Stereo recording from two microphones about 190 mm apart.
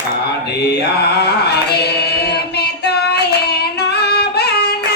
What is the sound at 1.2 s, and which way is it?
Singing, 60° left (ahead or behind).